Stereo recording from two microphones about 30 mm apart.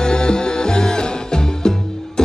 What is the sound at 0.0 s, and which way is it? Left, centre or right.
Music, left.